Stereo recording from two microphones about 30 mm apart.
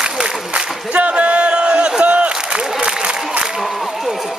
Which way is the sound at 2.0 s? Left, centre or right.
Right.